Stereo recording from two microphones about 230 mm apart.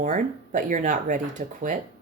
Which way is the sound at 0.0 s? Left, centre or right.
Right.